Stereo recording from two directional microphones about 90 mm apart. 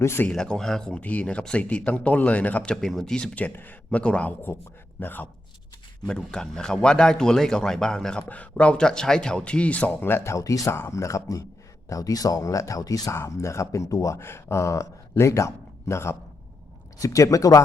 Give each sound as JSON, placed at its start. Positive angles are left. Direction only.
{"t": 0.0, "sound": "a man's voice", "side_deg": 30}
{"t": 0.3, "sound": "a man's voice", "side_deg": 10}
{"t": 6.1, "sound": "a man's voice", "side_deg": 10}
{"t": 13.1, "sound": "speech", "side_deg": 30}